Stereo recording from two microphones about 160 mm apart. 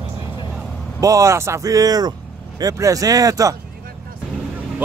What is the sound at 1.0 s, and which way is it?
Speech, 20° right (ahead or behind).